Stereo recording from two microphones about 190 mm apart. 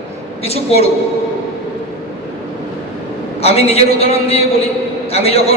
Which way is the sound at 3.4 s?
30° left (ahead or behind).